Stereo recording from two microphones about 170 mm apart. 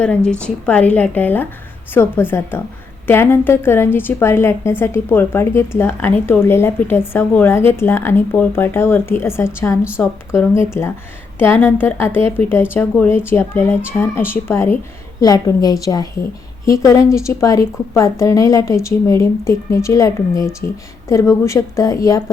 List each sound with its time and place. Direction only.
0.3 s a woman's voice: 5° left (ahead or behind)